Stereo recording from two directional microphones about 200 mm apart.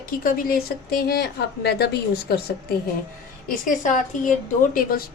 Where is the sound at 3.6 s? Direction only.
40° left (ahead or behind).